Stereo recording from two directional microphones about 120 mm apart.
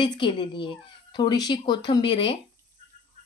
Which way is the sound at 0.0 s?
40° left (ahead or behind).